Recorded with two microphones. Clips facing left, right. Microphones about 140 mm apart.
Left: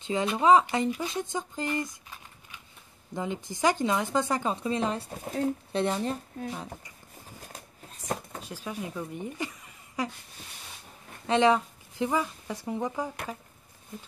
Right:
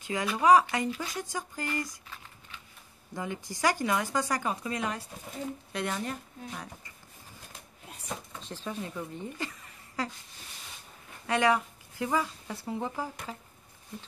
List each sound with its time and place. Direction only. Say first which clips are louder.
0.0 s speech: left 2 dB; 25° left (ahead or behind)
5.0 s speech: left 9 dB; 60° left (ahead or behind)
5.7 s speech: left 5 dB; 30° left (ahead or behind)
8.4 s speech: left 1 dB; 10° left (ahead or behind)
11.2 s speech: left 3 dB; 25° left (ahead or behind)